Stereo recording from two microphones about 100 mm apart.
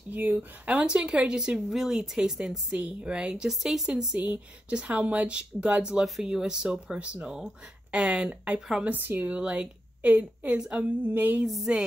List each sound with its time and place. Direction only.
0.1 s speech: 20° right (ahead or behind)
8.9 s speech: 15° right (ahead or behind)
11.4 s a sound: centre (ahead or behind)